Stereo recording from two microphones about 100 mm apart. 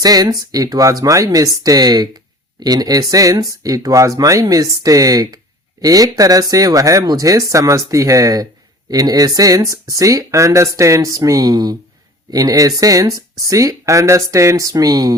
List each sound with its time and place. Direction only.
0.0 s speech: 40° right (ahead or behind)